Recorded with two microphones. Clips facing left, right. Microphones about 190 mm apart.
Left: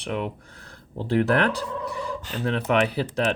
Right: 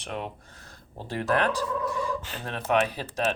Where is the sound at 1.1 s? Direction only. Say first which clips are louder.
Left 5 dB; 60° left (ahead or behind).